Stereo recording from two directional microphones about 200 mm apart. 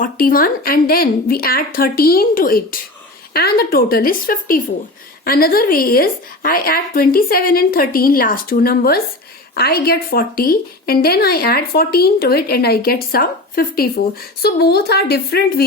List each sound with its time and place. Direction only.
0.0 s a woman's voice: 45° left (ahead or behind)